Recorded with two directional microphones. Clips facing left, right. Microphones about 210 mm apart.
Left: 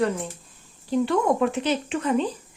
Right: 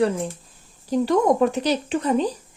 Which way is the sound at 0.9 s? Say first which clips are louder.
Right 3 dB; 40° right (ahead or behind).